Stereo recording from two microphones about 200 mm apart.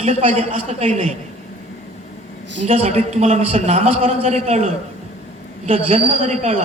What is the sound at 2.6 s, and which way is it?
A woman's voice, 35° right (ahead or behind).